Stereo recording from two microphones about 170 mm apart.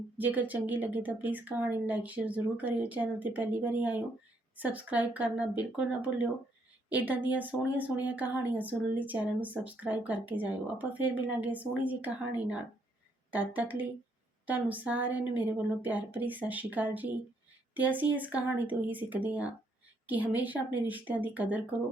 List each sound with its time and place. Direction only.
0.2 s speech: 10° right (ahead or behind)